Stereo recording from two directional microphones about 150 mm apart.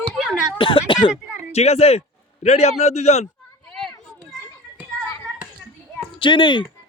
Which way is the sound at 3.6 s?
5° left (ahead or behind).